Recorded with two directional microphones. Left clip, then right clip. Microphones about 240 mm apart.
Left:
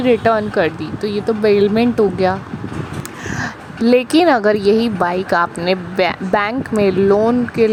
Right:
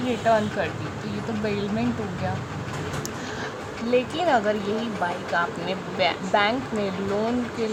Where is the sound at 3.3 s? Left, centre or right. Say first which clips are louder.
Left 7 dB; left.